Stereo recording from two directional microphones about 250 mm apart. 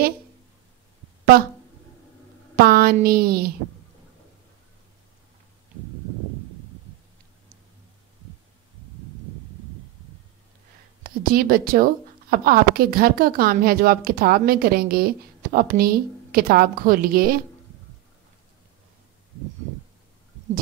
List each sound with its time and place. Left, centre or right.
2.5 s a woman's voice: right
11.1 s a woman's voice: right